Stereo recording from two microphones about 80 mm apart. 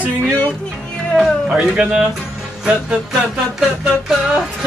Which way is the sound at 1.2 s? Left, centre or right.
Centre.